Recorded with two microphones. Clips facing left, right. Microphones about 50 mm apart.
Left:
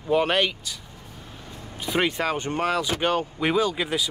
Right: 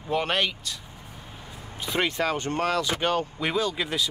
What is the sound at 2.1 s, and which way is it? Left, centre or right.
Speech, centre.